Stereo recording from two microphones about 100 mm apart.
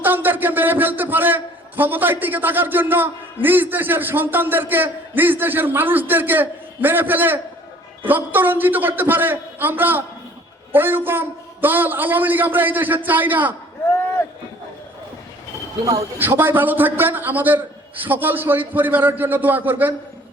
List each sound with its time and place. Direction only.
0.0 s a man's voice: 20° right (ahead or behind)
16.1 s a man's voice: 20° right (ahead or behind)